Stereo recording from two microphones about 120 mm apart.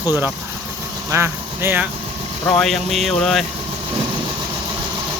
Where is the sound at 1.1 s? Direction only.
20° right (ahead or behind).